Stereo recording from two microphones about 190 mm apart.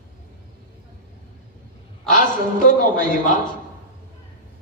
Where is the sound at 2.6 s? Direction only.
45° left (ahead or behind).